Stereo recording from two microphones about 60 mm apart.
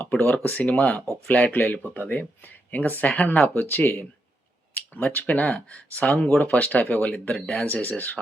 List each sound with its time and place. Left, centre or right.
0.0 s speech: left
1.5 s speech: left